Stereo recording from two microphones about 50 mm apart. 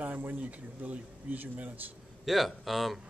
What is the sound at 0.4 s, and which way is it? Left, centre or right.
Speech, right.